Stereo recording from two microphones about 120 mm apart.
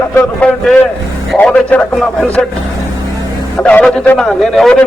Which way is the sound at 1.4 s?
10° left (ahead or behind).